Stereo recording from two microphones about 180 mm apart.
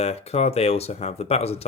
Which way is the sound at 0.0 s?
35° left (ahead or behind).